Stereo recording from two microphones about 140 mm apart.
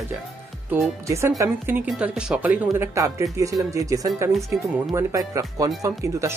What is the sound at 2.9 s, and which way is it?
Speech, 20° right (ahead or behind).